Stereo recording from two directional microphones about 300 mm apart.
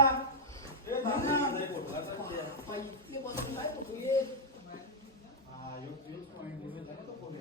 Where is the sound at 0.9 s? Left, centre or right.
Centre.